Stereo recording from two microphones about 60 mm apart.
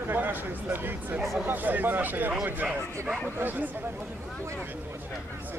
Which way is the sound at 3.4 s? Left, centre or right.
Right.